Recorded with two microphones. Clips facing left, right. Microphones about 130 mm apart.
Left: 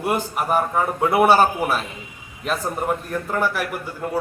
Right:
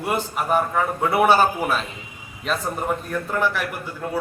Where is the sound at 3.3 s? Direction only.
10° left (ahead or behind).